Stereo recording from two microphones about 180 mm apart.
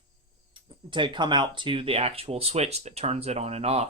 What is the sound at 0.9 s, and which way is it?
Speech, 25° right (ahead or behind).